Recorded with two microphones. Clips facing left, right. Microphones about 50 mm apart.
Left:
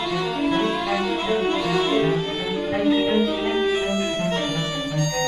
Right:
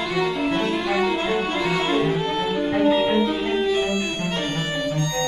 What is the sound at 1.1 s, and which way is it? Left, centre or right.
Violin, centre.